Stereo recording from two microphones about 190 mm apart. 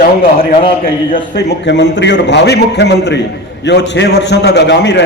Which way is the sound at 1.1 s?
60° left (ahead or behind).